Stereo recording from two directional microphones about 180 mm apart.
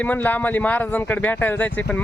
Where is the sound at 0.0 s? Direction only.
10° left (ahead or behind).